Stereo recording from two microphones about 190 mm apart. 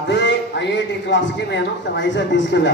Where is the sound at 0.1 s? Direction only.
70° left (ahead or behind).